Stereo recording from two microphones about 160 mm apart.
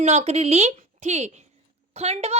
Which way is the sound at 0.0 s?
45° right (ahead or behind).